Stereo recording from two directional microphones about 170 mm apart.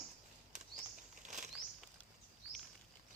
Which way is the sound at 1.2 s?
45° right (ahead or behind).